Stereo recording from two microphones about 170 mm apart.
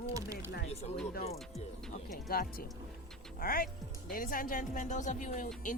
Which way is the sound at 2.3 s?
60° left (ahead or behind).